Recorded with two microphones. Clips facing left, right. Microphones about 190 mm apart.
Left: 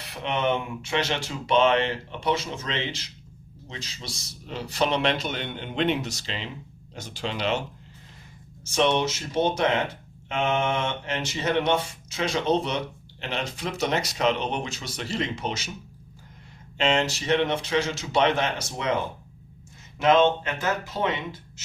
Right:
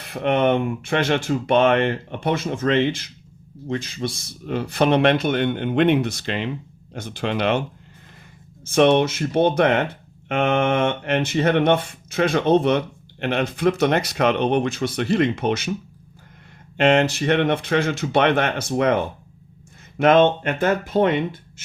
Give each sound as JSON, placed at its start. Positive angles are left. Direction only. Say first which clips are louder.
{"t": 0.0, "sound": "speech", "louder": "right 8 dB", "side_deg": -55}
{"t": 8.6, "sound": "speech", "louder": "right 7 dB", "side_deg": -55}
{"t": 16.7, "sound": "speech", "louder": "right 7 dB", "side_deg": -60}
{"t": 20.0, "sound": "speech", "louder": "right 4 dB", "side_deg": -55}